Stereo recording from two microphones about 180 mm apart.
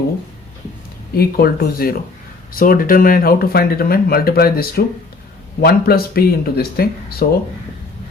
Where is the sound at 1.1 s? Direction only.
60° left (ahead or behind).